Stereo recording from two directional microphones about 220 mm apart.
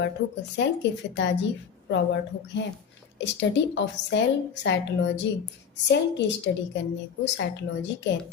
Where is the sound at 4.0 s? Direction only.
50° left (ahead or behind).